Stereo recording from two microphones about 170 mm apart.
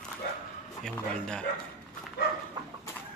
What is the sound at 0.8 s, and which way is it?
Speech, 5° left (ahead or behind).